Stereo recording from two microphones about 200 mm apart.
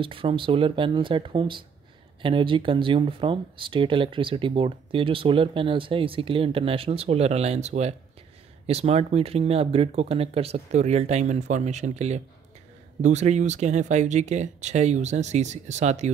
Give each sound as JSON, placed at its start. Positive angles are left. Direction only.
{"t": 0.0, "sound": "speech", "side_deg": -25}